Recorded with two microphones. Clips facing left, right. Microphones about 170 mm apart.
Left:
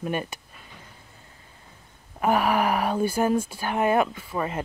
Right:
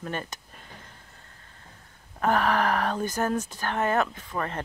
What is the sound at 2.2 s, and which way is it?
Speech, 10° left (ahead or behind).